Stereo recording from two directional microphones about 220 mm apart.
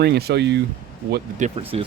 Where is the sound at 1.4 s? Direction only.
25° right (ahead or behind).